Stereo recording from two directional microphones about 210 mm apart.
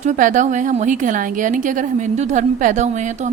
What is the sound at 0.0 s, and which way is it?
A woman's voice, 35° right (ahead or behind).